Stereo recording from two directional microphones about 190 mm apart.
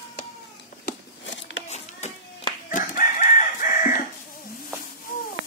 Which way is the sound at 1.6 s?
35° left (ahead or behind).